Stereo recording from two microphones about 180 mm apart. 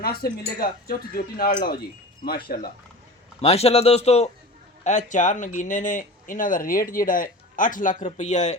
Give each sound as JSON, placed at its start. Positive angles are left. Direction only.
{"t": 0.0, "sound": "speech", "side_deg": 55}
{"t": 3.4, "sound": "speech", "side_deg": 35}